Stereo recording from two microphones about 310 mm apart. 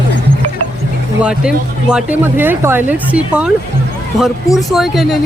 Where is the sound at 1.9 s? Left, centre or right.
Centre.